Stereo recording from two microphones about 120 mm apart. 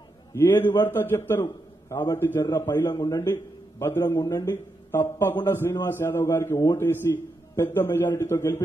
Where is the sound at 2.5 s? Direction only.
35° left (ahead or behind).